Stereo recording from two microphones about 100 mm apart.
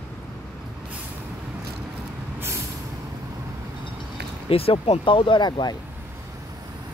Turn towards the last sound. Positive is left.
turn(degrees=45)  # may be behind; listen again after turning